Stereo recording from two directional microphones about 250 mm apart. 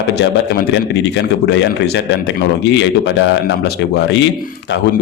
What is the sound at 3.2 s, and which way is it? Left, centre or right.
A man's voice, left.